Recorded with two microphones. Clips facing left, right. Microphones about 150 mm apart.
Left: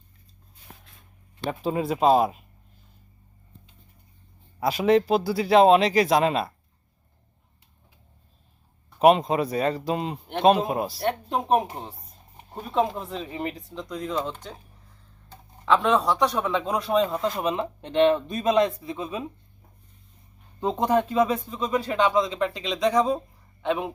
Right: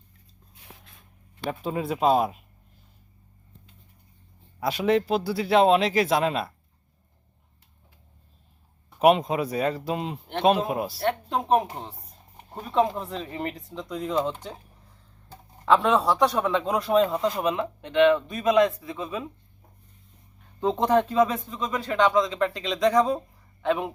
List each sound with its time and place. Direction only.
1.5 s speech: centre (ahead or behind)
4.6 s speech: centre (ahead or behind)
9.0 s speech: 5° right (ahead or behind)
11.3 s speech: 15° left (ahead or behind); by 17.2 s 5° right (ahead or behind)
17.4 s speech: 25° left (ahead or behind)
20.6 s speech: 10° left (ahead or behind)